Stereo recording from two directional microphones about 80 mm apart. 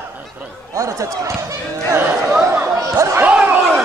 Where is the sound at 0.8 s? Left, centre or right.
Right.